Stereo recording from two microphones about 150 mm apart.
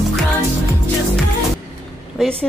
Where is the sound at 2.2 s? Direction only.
Centre (ahead or behind).